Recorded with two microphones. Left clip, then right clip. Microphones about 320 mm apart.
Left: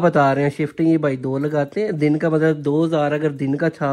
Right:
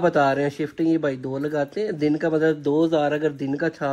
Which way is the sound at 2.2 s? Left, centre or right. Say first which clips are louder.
Left 3 dB; centre.